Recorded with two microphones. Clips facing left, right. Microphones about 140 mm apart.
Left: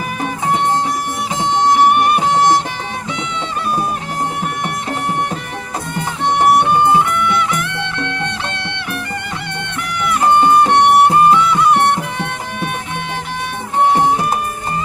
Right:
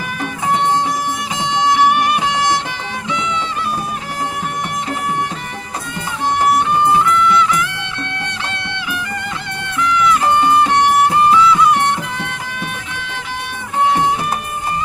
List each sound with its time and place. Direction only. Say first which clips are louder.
1.5 s music: left 2 dB; 50° left (ahead or behind)
6.5 s music: left 2 dB; 65° left (ahead or behind)
9.7 s music: right 5 dB; 60° left (ahead or behind)